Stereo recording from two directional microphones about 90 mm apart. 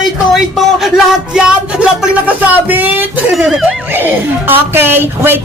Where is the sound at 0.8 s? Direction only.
5° right (ahead or behind); by 3.1 s 20° right (ahead or behind).